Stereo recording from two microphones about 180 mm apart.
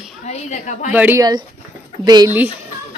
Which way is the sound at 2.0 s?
20° right (ahead or behind).